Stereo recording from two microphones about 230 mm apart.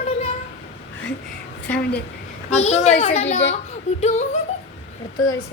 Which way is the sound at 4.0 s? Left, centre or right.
Left.